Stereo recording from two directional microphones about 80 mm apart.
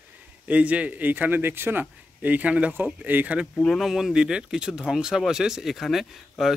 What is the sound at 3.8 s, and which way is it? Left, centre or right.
Speech, centre.